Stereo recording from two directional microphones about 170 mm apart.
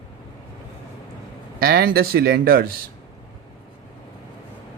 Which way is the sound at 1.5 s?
60° right (ahead or behind).